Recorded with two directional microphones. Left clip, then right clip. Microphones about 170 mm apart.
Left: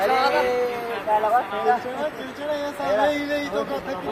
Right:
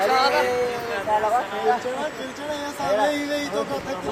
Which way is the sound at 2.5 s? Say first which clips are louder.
Left 1 dB; 5° left (ahead or behind).